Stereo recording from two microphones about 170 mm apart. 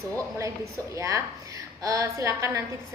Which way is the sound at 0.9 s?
20° right (ahead or behind).